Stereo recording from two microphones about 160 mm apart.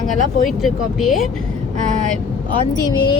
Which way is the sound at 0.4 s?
Centre (ahead or behind).